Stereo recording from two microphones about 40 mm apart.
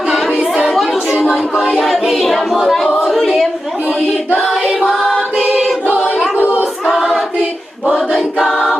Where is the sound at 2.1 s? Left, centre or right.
Centre.